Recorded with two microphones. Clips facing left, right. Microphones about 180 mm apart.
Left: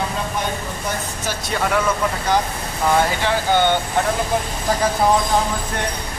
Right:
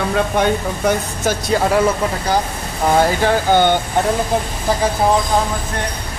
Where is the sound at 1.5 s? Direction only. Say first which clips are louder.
Right 5 dB; 30° right (ahead or behind).